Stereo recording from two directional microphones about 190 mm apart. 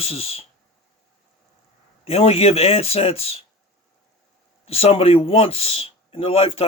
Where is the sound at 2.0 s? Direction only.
30° left (ahead or behind).